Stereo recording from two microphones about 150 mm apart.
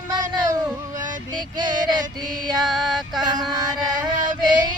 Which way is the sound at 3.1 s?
30° right (ahead or behind).